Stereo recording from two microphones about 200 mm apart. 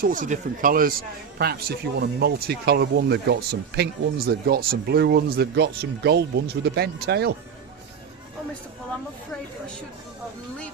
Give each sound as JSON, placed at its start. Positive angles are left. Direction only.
{"t": 0.0, "sound": "a man's voice", "side_deg": -40}